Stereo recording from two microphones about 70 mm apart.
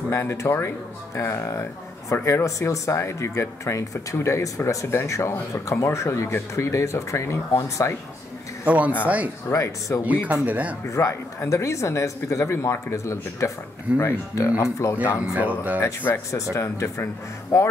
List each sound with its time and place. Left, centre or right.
0.1 s speech: left
8.6 s speech: right
9.5 s speech: left
10.2 s speech: right
10.9 s speech: left
15.3 s speech: right
16.5 s speech: left